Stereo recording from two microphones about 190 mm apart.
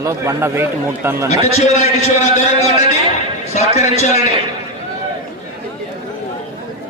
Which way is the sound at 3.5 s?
35° left (ahead or behind).